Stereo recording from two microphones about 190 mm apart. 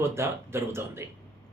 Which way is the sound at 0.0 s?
15° right (ahead or behind).